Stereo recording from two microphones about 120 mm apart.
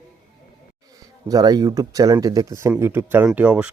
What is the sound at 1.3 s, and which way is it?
Speech, 30° right (ahead or behind).